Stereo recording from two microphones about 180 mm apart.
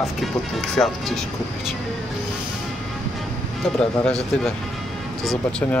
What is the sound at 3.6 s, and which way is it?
Speech, 5° left (ahead or behind).